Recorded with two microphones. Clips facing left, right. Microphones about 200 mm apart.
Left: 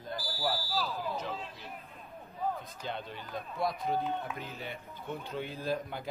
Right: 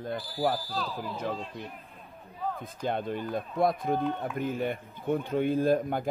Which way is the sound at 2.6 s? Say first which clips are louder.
Right 8 dB; 50° right (ahead or behind).